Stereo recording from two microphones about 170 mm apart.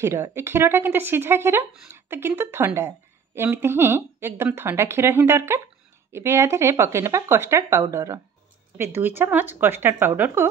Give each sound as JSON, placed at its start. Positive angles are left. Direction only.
{"t": 0.0, "sound": "speech", "side_deg": -15}